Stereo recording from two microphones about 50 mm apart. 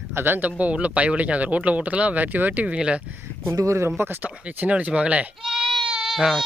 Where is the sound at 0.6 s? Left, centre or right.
Right.